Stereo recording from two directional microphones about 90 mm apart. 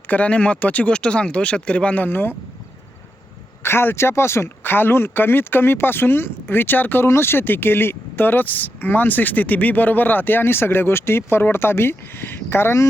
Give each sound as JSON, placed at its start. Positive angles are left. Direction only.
{"t": 0.1, "sound": "speech", "side_deg": 15}
{"t": 3.6, "sound": "speech", "side_deg": 25}